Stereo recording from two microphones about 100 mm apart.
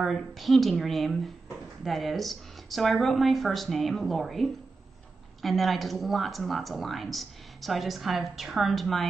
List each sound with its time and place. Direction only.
0.0 s a woman's voice: centre (ahead or behind)